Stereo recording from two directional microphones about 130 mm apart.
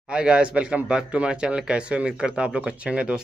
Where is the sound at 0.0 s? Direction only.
5° right (ahead or behind).